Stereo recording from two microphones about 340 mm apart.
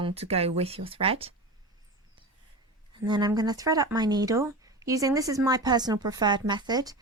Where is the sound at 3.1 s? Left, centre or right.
Centre.